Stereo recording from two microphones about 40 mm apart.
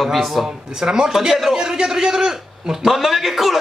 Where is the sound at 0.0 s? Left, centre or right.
Centre.